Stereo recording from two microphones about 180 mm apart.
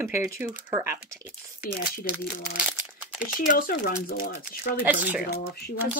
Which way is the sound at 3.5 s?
55° left (ahead or behind).